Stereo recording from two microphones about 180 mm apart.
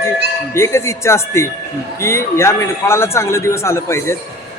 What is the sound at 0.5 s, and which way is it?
Speech, 15° left (ahead or behind).